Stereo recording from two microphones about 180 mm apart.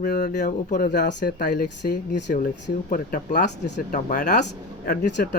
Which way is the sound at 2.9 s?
45° left (ahead or behind).